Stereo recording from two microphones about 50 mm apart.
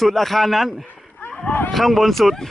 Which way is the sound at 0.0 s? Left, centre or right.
Centre.